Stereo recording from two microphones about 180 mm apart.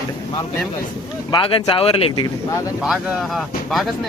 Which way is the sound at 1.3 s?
30° left (ahead or behind).